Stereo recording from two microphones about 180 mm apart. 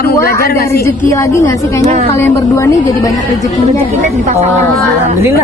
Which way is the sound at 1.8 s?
40° right (ahead or behind).